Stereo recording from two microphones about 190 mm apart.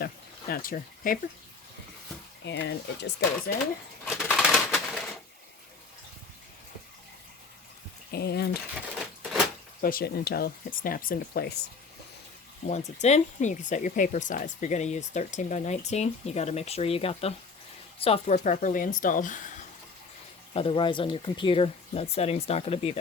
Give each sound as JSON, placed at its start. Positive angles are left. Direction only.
{"t": 0.0, "sound": "speech", "side_deg": 50}
{"t": 2.4, "sound": "speech", "side_deg": 65}
{"t": 4.1, "sound": "pigeon", "side_deg": 0}
{"t": 8.1, "sound": "speech", "side_deg": 55}
{"t": 9.8, "sound": "speech", "side_deg": 55}
{"t": 12.6, "sound": "speech", "side_deg": 35}
{"t": 20.5, "sound": "speech", "side_deg": 30}